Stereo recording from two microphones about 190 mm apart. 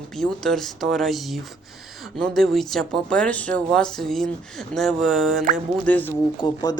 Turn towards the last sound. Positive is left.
turn(degrees=20)  # may be behind; listen again after turning